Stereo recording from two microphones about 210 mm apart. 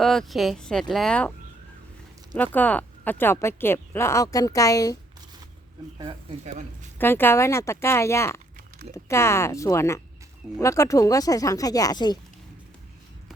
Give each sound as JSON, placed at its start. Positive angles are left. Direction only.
{"t": 0.0, "sound": "speech", "side_deg": 0}
{"t": 2.3, "sound": "speech", "side_deg": 10}
{"t": 6.4, "sound": "speech", "side_deg": -35}
{"t": 7.0, "sound": "speech", "side_deg": 10}